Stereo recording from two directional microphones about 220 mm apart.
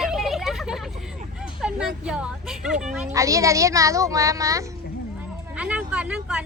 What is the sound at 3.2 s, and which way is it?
Speech, 15° right (ahead or behind).